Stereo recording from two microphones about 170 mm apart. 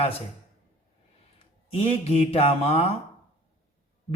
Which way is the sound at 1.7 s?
35° left (ahead or behind).